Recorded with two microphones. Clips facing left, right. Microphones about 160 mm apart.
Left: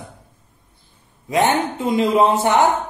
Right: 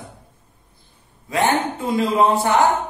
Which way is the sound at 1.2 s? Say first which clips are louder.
Left 2 dB; 20° left (ahead or behind).